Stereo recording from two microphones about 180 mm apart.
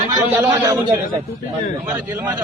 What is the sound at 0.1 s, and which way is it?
Speech, 10° right (ahead or behind).